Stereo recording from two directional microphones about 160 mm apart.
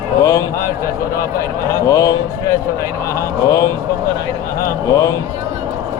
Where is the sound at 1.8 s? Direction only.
20° left (ahead or behind).